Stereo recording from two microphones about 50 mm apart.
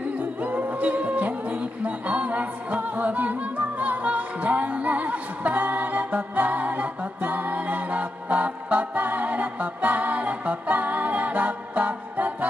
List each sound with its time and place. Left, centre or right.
0.4 s music: right